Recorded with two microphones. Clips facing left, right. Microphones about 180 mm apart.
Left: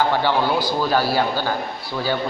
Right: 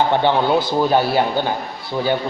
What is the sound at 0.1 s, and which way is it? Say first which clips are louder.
A man's voice: right 4 dB; 20° right (ahead or behind).